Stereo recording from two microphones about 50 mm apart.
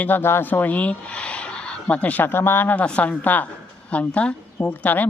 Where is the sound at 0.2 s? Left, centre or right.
Left.